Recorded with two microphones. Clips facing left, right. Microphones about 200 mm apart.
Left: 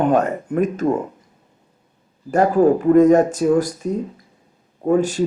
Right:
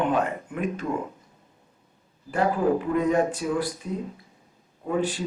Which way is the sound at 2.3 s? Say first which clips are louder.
Left 8 dB; 45° left (ahead or behind).